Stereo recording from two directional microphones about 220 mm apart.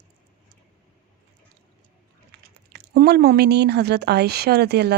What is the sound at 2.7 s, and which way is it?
Speech, 45° right (ahead or behind).